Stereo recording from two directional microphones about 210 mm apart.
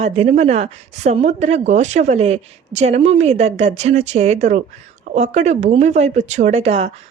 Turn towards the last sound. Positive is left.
turn(degrees=-30)  # may be behind; listen again after turning